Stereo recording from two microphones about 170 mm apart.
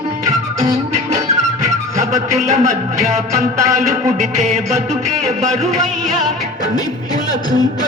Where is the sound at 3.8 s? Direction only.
45° right (ahead or behind).